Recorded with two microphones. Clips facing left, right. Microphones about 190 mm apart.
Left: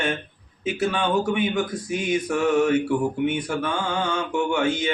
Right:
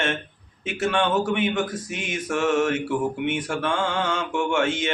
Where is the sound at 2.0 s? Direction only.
Centre (ahead or behind).